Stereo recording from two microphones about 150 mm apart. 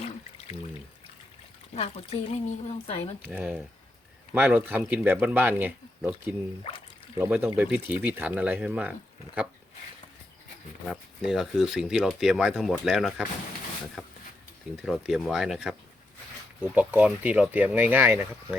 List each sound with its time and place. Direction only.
1.7 s speech: 40° left (ahead or behind)
3.2 s speech: 10° right (ahead or behind)
11.2 s speech: 5° right (ahead or behind)
14.8 s speech: 5° right (ahead or behind)